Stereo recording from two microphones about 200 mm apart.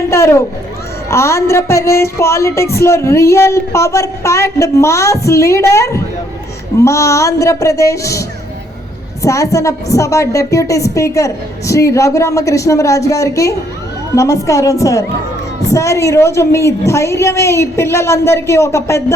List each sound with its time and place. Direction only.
0.1 s a sound: 15° left (ahead or behind)
1.1 s speech: 15° left (ahead or behind)
9.2 s speech: 15° left (ahead or behind)